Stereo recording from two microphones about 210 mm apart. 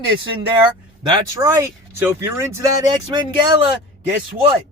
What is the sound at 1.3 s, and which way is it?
Speech, 15° right (ahead or behind).